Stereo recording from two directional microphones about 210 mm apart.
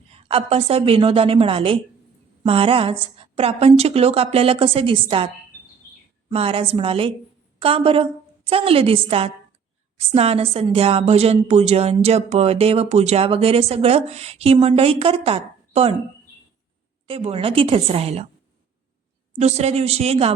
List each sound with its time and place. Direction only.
0.3 s a woman's voice: 25° right (ahead or behind)
6.3 s a woman's voice: 25° right (ahead or behind)
17.1 s a woman's voice: 30° right (ahead or behind)
19.3 s a woman's voice: 30° right (ahead or behind)